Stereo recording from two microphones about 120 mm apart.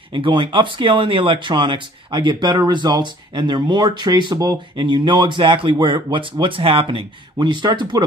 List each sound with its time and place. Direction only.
0.1 s speech: 45° right (ahead or behind)